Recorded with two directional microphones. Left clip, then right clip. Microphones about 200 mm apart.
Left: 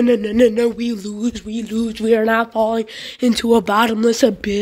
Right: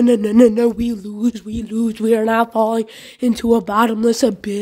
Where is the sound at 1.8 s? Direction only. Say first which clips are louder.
Right 2 dB; 35° right (ahead or behind).